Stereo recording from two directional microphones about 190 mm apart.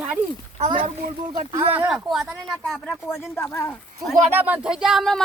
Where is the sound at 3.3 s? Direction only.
15° left (ahead or behind).